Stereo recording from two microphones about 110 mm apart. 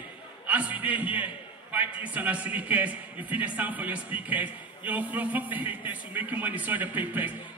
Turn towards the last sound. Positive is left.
turn(degrees=-15)  # may be behind; listen again after turning